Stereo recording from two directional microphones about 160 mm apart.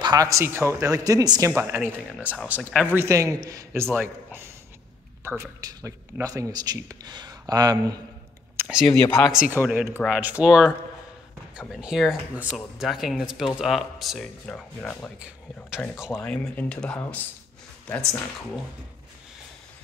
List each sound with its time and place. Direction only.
0.0 s speech: 25° right (ahead or behind)
1.5 s a man's voice: 15° right (ahead or behind)
2.1 s speech: 5° left (ahead or behind)
2.4 s a man's voice: 10° right (ahead or behind); by 8.0 s 25° right (ahead or behind)
8.6 s speech: centre (ahead or behind)
9.0 s speech: 25° left (ahead or behind)
9.3 s a man's voice: 5° right (ahead or behind)
15.1 s speech: 5° right (ahead or behind)